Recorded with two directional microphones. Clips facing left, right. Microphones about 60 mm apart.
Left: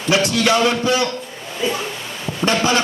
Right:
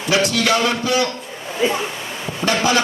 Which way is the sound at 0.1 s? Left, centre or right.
Left.